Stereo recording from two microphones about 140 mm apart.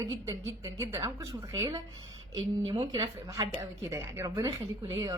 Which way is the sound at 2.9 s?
30° right (ahead or behind).